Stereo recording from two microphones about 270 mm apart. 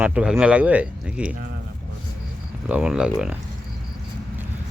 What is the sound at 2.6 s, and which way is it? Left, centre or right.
Speech, centre.